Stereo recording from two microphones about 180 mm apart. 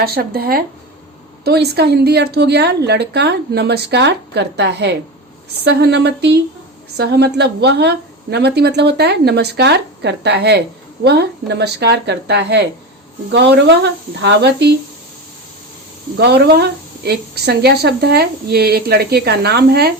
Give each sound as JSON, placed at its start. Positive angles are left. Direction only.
{"t": 0.0, "sound": "a woman's voice", "side_deg": -60}
{"t": 16.1, "sound": "a woman's voice", "side_deg": -65}